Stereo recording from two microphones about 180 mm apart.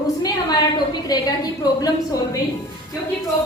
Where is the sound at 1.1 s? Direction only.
20° left (ahead or behind).